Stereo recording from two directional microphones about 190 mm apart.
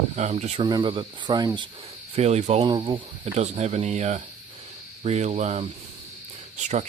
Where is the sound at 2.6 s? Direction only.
25° right (ahead or behind).